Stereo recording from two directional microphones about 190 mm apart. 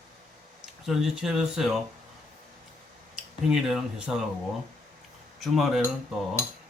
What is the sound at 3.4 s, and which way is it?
Speech, centre (ahead or behind).